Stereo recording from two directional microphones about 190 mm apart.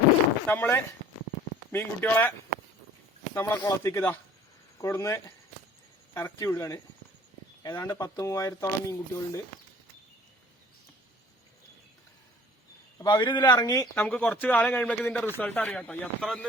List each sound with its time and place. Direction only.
0.4 s speech: 10° left (ahead or behind)
3.3 s speech: 15° left (ahead or behind)
13.0 s speech: 25° left (ahead or behind); by 16.5 s 5° left (ahead or behind)